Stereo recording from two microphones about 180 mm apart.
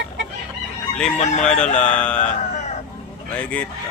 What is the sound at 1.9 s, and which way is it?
Speech, 5° left (ahead or behind).